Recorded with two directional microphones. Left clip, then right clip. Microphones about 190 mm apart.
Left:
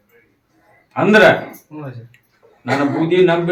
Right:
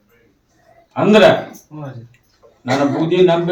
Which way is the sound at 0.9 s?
15° right (ahead or behind).